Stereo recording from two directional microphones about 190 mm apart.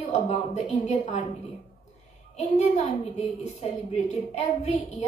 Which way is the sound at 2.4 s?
35° left (ahead or behind).